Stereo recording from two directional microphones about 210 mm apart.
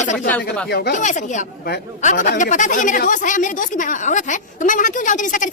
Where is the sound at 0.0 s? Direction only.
35° left (ahead or behind).